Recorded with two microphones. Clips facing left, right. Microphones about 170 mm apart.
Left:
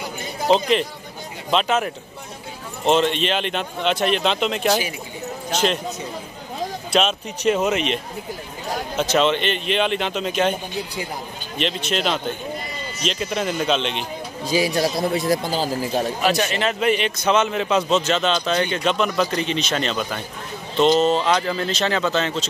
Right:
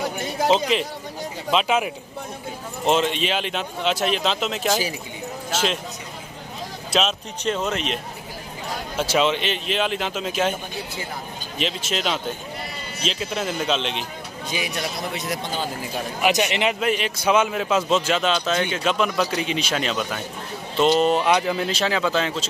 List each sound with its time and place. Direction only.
0.5 s a man's voice: centre (ahead or behind)
6.9 s a man's voice: centre (ahead or behind)
7.5 s speech: 10° left (ahead or behind)
8.9 s a man's voice: 10° right (ahead or behind)
11.5 s a man's voice: 5° right (ahead or behind)
14.5 s a man's voice: 35° left (ahead or behind)
16.2 s speech: 15° right (ahead or behind)
16.8 s a man's voice: centre (ahead or behind)